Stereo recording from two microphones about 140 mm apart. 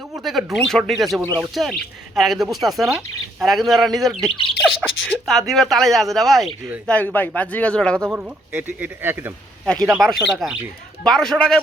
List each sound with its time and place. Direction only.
0.3 s speech: centre (ahead or behind)
4.3 s speech: 40° left (ahead or behind)
4.8 s speech: 5° left (ahead or behind)
6.8 s speech: 10° left (ahead or behind)
8.0 s speech: 10° right (ahead or behind)
9.6 s speech: 5° left (ahead or behind)